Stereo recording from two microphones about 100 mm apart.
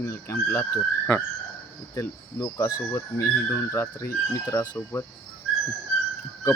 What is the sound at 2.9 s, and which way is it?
Speech, 25° left (ahead or behind).